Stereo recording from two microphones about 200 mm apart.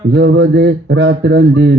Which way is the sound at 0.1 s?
65° right (ahead or behind).